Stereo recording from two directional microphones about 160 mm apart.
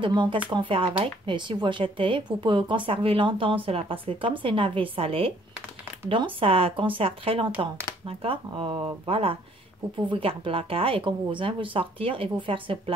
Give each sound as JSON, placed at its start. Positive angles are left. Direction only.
{"t": 0.0, "sound": "speech", "side_deg": -30}